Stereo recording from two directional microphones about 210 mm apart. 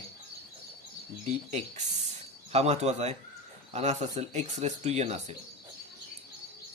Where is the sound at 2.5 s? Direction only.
30° right (ahead or behind).